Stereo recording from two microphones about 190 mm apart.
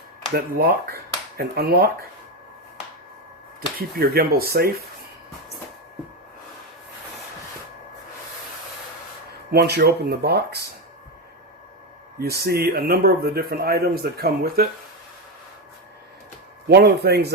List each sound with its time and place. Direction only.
0.3 s speech: 55° right (ahead or behind)
3.8 s a man's voice: 55° right (ahead or behind)
9.5 s speech: 60° right (ahead or behind)
12.2 s a man's voice: 55° right (ahead or behind)
16.6 s speech: 60° right (ahead or behind)